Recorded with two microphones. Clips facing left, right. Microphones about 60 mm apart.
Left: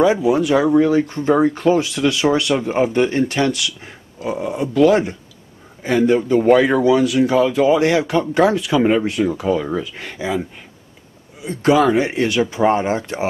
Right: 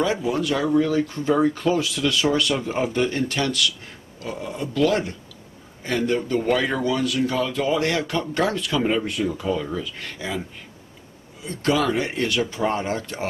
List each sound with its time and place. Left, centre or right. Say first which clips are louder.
0.0 s speech: left 8 dB; centre
1.0 s speech: left 5 dB; left
1.4 s speech: left 5 dB; centre
9.7 s speech: left 6 dB; left
11.4 s speech: left 7 dB; centre
12.6 s speech: left 7 dB; left